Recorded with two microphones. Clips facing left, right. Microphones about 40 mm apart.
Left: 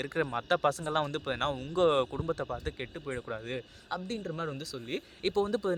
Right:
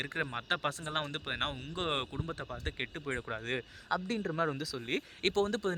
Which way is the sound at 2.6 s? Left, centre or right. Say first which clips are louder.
Left 1 dB; right.